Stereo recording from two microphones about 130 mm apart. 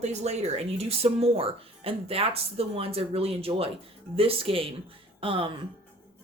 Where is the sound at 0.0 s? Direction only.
60° right (ahead or behind); by 5.5 s 45° right (ahead or behind).